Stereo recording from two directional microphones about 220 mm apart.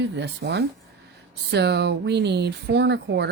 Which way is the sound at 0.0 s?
55° right (ahead or behind).